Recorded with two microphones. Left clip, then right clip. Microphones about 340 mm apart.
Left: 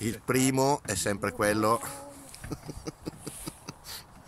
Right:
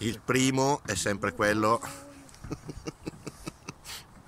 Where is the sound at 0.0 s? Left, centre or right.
Centre.